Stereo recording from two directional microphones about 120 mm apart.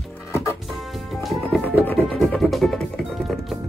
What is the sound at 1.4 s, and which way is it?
Music, 15° left (ahead or behind).